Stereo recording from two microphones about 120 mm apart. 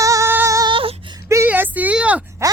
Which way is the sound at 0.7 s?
45° right (ahead or behind).